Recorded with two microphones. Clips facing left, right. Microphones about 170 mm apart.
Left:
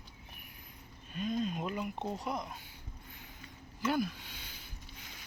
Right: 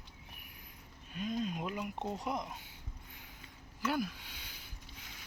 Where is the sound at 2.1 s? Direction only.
15° right (ahead or behind).